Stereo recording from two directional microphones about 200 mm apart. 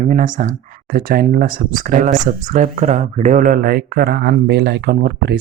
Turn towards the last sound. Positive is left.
turn(degrees=-55)  # may be behind; listen again after turning